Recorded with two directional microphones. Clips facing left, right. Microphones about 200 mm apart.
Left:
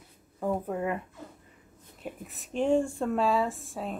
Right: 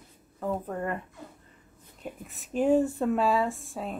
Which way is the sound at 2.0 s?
Centre (ahead or behind).